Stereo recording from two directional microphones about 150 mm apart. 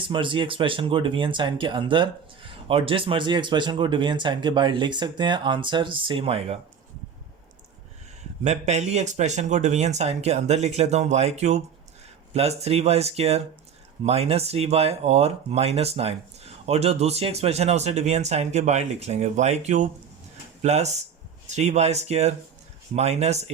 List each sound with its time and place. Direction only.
0.0 s speech: 35° right (ahead or behind)
8.4 s speech: 50° right (ahead or behind)